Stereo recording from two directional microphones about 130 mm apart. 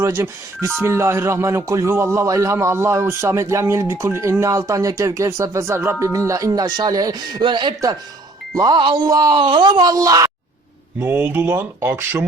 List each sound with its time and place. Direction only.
0.0 s speech: 20° right (ahead or behind)
11.0 s speech: 15° right (ahead or behind)